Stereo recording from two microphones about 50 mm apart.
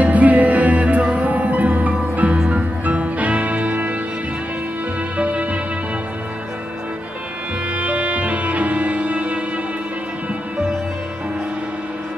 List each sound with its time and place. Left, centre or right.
0.0 s music: right
2.3 s music: centre
2.8 s music: right
5.1 s music: right
7.7 s music: right